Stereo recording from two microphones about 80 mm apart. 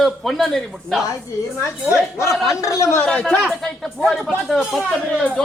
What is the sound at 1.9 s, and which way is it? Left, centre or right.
Speech, left.